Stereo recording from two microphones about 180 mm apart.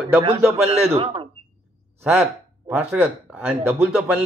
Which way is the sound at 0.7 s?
35° right (ahead or behind).